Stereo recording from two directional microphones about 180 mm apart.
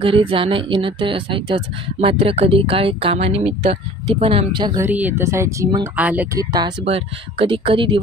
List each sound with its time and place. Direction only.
0.0 s a woman's voice: 30° right (ahead or behind)
4.8 s speech: 10° right (ahead or behind)
5.9 s speech: 10° right (ahead or behind)
6.5 s speech: 30° right (ahead or behind)